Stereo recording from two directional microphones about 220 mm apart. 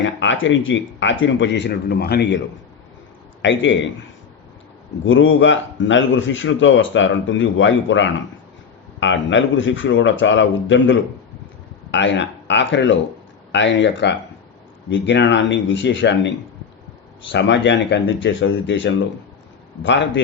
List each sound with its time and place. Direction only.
0.0 s speech: 55° left (ahead or behind)
3.4 s speech: 55° left (ahead or behind)
5.0 s speech: 60° left (ahead or behind)
17.3 s speech: 55° left (ahead or behind)